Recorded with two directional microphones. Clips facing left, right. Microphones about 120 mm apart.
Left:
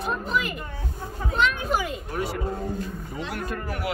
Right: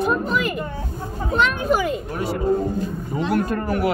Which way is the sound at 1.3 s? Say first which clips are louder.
Right 5 dB; 50° right (ahead or behind).